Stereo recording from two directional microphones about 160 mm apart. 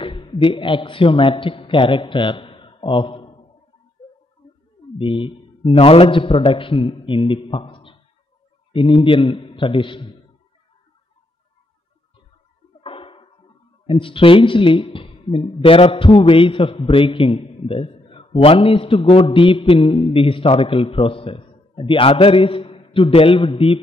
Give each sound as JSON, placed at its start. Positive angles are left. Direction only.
{"t": 0.0, "sound": "a man's voice", "side_deg": 30}
{"t": 4.9, "sound": "a man's voice", "side_deg": 30}
{"t": 12.8, "sound": "a sound", "side_deg": 35}
{"t": 13.8, "sound": "speech", "side_deg": 35}